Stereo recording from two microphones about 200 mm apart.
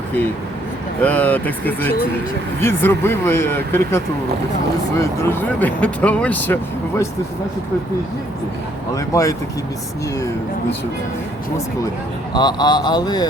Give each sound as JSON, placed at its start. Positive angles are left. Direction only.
{"t": 1.0, "sound": "speech", "side_deg": 10}
{"t": 9.0, "sound": "speech", "side_deg": 15}
{"t": 12.3, "sound": "speech", "side_deg": 20}